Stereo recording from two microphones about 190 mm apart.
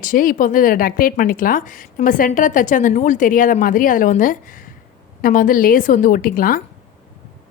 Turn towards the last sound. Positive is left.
turn(degrees=45)  # may be behind; listen again after turning